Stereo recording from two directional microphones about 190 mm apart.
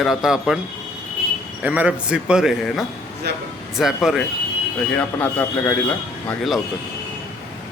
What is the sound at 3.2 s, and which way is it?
Speech, 60° right (ahead or behind).